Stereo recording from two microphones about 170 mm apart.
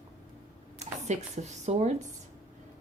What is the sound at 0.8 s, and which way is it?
Speech, 45° right (ahead or behind).